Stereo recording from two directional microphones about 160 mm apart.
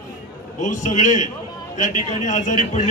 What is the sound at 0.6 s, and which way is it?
A man's voice, 50° left (ahead or behind).